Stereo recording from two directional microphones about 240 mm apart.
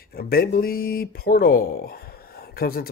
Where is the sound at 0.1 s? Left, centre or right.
Left.